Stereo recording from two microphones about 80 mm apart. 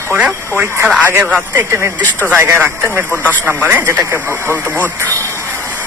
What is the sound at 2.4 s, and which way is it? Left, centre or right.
Speech, right.